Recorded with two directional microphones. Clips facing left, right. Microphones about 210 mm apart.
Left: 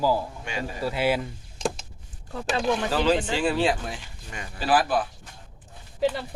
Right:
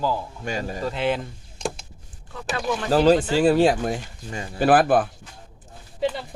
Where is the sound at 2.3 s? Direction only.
35° left (ahead or behind).